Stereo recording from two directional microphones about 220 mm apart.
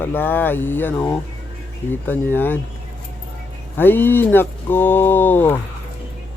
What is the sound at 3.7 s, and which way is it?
Speech, 10° left (ahead or behind).